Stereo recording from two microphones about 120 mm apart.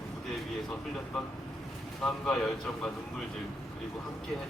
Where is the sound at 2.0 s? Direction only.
5° left (ahead or behind).